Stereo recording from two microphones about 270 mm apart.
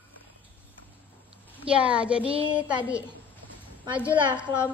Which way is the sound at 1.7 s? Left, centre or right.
Centre.